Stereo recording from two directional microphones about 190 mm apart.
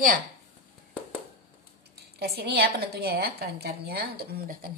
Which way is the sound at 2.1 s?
55° right (ahead or behind).